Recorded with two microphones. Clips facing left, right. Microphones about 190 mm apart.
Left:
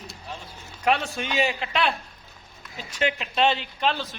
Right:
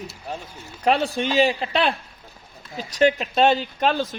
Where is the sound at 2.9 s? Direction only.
40° right (ahead or behind).